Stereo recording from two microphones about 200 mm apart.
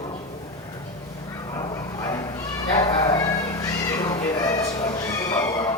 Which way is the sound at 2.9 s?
20° left (ahead or behind).